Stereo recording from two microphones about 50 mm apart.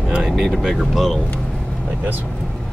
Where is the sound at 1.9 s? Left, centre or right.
Right.